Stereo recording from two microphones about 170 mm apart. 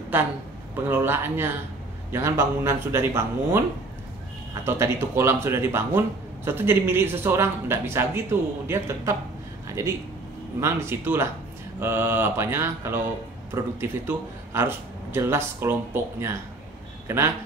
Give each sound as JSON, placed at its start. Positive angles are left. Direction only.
{"t": 0.8, "sound": "a man's voice", "side_deg": -15}
{"t": 4.6, "sound": "a man's voice", "side_deg": -15}